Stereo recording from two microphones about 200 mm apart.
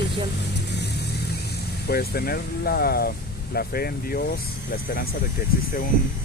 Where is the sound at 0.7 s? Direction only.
55° left (ahead or behind).